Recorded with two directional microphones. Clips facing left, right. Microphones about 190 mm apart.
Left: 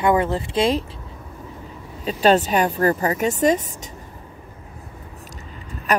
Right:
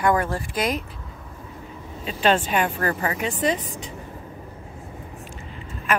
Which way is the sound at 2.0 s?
40° left (ahead or behind).